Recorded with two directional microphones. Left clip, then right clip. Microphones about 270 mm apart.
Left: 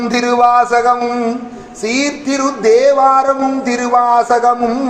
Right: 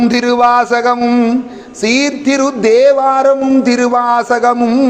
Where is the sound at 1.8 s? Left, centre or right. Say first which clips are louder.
Right 3 dB; right.